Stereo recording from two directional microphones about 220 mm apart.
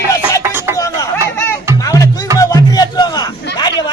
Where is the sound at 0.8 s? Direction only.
15° left (ahead or behind).